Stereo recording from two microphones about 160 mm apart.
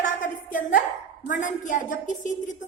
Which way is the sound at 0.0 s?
55° left (ahead or behind).